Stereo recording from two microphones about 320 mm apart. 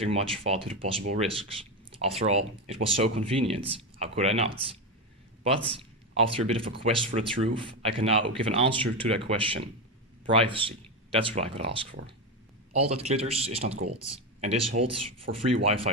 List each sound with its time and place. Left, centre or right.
0.0 s speech: centre
5.4 s a sound: centre
6.3 s speech: centre
14.7 s speech: right
15.2 s speech: centre